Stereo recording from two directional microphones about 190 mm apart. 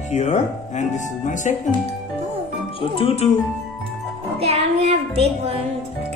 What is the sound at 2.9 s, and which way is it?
Speech, 30° left (ahead or behind).